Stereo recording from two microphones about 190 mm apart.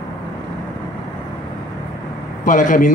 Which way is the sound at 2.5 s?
45° left (ahead or behind).